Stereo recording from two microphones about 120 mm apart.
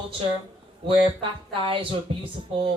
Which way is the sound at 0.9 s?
45° right (ahead or behind).